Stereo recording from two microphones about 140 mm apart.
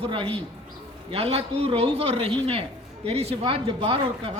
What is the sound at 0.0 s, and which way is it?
A man's voice, 40° right (ahead or behind).